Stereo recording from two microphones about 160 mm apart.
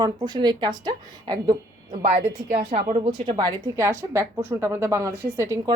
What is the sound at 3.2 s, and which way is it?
A woman's voice, 25° right (ahead or behind).